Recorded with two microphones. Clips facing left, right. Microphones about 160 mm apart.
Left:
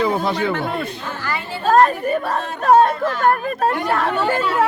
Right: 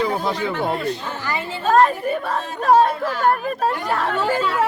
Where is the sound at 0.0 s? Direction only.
65° left (ahead or behind).